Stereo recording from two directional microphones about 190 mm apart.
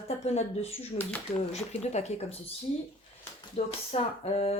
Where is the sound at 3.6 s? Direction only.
35° left (ahead or behind).